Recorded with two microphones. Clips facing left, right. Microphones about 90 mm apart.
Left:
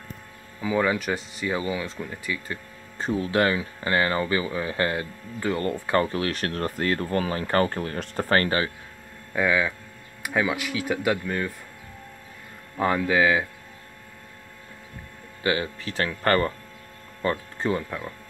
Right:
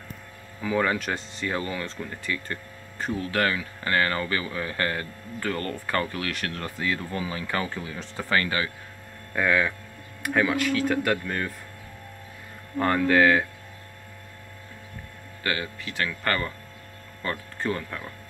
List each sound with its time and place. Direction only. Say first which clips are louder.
0.6 s speech: left 1 dB; 5° left (ahead or behind)
3.0 s speech: left 3 dB; 25° left (ahead or behind)
9.3 s speech: even; 5° left (ahead or behind)
12.7 s speech: right 1 dB; 5° left (ahead or behind)
15.4 s speech: left 4 dB; 25° left (ahead or behind)
17.2 s speech: left 4 dB; 20° left (ahead or behind)